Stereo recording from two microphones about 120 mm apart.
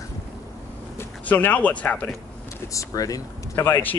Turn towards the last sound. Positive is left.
turn(degrees=20)  # may be behind; listen again after turning